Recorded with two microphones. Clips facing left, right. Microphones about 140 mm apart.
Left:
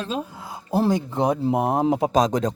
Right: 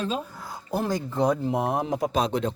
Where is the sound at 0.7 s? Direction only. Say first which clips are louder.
Left 6 dB; 25° left (ahead or behind).